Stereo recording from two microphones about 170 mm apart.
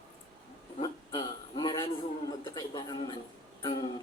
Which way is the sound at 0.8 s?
25° left (ahead or behind).